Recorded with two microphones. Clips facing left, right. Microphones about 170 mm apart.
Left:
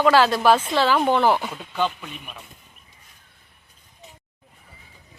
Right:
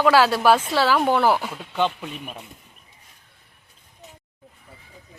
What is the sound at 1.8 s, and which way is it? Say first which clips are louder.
Speech: right 2 dB; 25° right (ahead or behind).